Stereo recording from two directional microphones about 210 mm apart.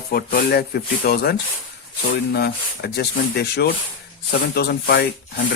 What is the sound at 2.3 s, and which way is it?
Speech, 50° left (ahead or behind).